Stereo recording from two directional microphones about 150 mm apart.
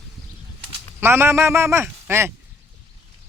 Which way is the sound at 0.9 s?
15° right (ahead or behind).